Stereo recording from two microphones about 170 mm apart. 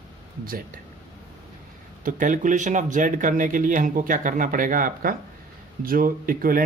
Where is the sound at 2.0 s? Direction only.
50° right (ahead or behind).